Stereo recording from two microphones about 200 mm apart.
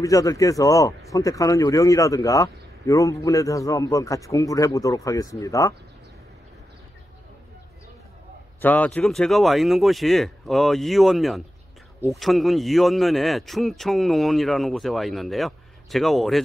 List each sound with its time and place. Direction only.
0.0 s speech: 15° left (ahead or behind)
8.5 s speech: 10° left (ahead or behind)